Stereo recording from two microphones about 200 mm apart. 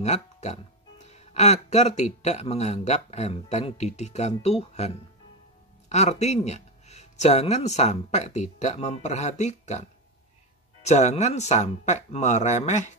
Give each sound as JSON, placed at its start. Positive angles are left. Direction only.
{"t": 0.0, "sound": "speech", "side_deg": 35}